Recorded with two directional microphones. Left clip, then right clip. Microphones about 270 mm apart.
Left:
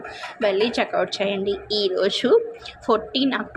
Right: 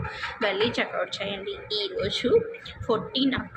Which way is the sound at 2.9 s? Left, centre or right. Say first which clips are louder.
Left 6 dB; left.